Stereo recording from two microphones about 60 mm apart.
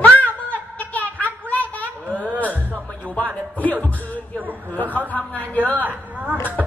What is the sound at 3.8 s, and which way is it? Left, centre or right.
Music, left.